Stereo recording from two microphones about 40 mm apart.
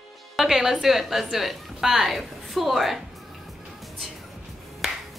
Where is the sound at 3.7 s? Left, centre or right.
Centre.